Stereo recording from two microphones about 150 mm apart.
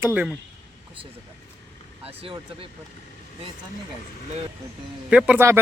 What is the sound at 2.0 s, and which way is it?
Speech, 40° right (ahead or behind).